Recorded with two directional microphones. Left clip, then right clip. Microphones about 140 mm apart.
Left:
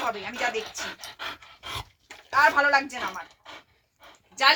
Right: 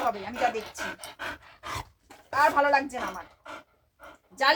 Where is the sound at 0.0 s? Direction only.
10° right (ahead or behind).